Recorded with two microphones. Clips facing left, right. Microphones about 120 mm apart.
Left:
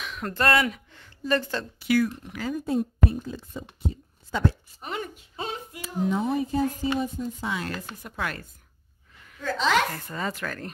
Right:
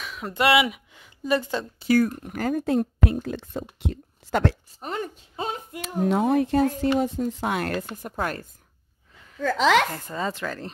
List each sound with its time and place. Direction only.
0.0 s a sound: centre (ahead or behind)
0.3 s speech: 5° right (ahead or behind)
1.8 s speech: 40° right (ahead or behind)
2.6 s a woman's voice: 75° right (ahead or behind)
4.7 s speech: 40° right (ahead or behind)
5.3 s a sound: 40° right (ahead or behind)
5.8 s speech: 65° right (ahead or behind); by 8.5 s 40° right (ahead or behind)
9.4 s a woman's voice: 90° right
9.9 s speech: 20° right (ahead or behind)